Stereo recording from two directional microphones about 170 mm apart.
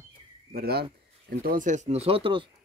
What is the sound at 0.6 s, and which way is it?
Speech, 70° right (ahead or behind).